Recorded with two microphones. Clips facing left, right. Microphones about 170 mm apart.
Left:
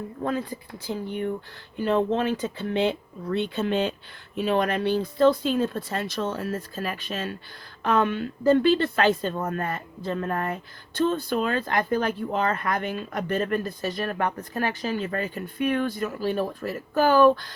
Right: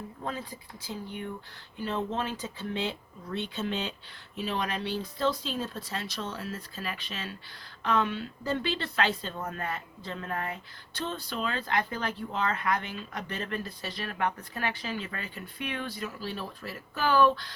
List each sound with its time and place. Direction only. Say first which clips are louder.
0.3 s speech: left 9 dB; 55° left (ahead or behind)